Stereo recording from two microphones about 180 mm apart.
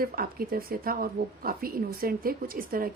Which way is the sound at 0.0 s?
55° right (ahead or behind).